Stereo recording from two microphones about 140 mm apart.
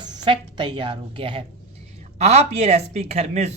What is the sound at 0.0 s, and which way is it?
A woman's voice, 35° right (ahead or behind).